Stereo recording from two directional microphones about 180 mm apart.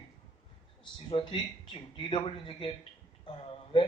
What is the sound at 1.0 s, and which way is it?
A man's voice, 25° left (ahead or behind).